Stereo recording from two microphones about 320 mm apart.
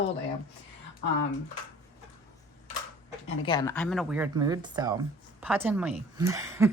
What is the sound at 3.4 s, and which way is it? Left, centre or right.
Speech, centre.